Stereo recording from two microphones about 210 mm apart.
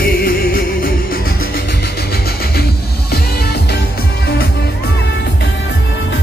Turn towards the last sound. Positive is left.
turn(degrees=50)  # may be behind; listen again after turning